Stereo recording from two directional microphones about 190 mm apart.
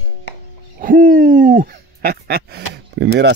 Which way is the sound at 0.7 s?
45° right (ahead or behind).